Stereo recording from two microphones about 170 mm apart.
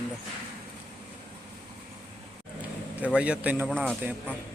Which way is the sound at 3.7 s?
5° left (ahead or behind).